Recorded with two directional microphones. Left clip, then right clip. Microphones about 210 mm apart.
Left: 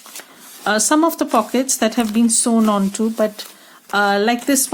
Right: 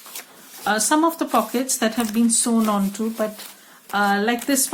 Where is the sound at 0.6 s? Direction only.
45° left (ahead or behind).